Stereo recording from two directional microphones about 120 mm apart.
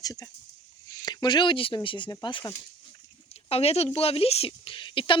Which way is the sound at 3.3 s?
55° left (ahead or behind).